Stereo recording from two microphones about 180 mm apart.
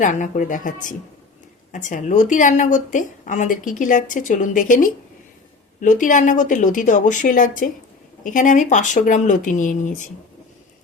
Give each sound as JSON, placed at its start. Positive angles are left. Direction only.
{"t": 0.0, "sound": "a woman's voice", "side_deg": 45}